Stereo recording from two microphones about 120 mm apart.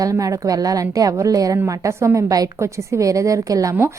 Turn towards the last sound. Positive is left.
turn(degrees=-30)  # may be behind; listen again after turning